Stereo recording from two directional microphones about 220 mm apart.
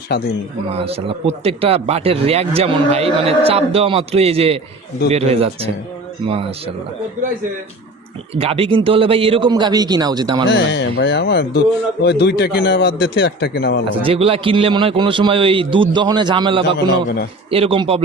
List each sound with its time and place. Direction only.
0.1 s a man's voice: 45° left (ahead or behind)
0.7 s speech: 25° right (ahead or behind)
8.4 s speech: 25° right (ahead or behind)
10.5 s a man's voice: 50° left (ahead or behind)
14.0 s speech: 25° right (ahead or behind)
16.6 s a man's voice: 50° left (ahead or behind)
17.5 s speech: 25° right (ahead or behind)